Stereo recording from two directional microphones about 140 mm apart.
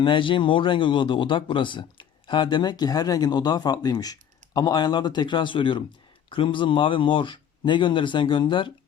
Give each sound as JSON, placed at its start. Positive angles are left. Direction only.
{"t": 0.0, "sound": "speech", "side_deg": 35}